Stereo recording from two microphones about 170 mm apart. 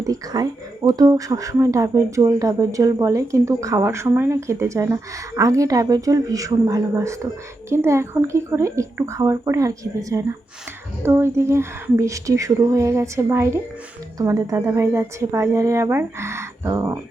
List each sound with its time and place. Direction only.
0.0 s a woman's voice: 20° right (ahead or behind)